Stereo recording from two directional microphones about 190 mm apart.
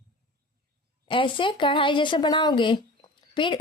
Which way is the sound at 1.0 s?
25° left (ahead or behind).